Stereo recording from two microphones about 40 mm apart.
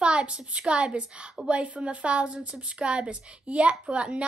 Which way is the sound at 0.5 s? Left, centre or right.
Right.